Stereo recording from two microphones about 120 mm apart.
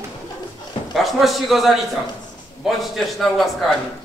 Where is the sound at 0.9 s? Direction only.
Centre (ahead or behind).